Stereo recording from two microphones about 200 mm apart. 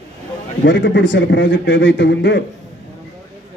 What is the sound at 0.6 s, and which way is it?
A man's voice, 65° left (ahead or behind).